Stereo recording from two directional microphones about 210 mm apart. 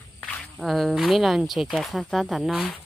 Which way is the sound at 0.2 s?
5° left (ahead or behind).